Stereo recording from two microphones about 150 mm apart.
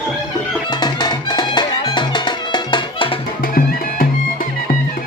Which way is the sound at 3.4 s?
75° left (ahead or behind).